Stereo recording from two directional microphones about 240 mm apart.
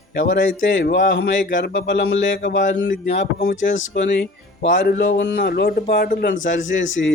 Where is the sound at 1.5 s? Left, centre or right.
Left.